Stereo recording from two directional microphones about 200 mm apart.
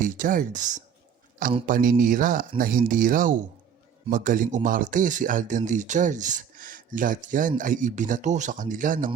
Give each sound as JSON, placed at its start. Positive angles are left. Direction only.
{"t": 0.0, "sound": "speech", "side_deg": -40}